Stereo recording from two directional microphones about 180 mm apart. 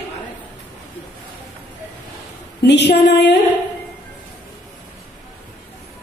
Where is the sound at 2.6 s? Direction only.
70° left (ahead or behind).